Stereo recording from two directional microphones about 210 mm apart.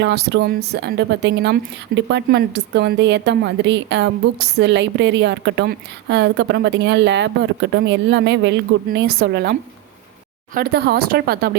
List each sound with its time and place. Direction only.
0.0 s a woman's voice: 55° right (ahead or behind)